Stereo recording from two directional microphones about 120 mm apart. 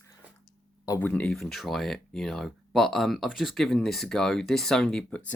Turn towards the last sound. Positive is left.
turn(degrees=5)  # may be behind; listen again after turning